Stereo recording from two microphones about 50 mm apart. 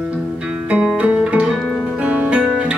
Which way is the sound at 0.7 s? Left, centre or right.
Right.